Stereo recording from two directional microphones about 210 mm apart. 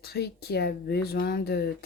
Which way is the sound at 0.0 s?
50° left (ahead or behind).